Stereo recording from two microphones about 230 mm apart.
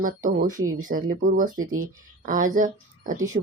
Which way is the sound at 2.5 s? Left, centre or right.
Right.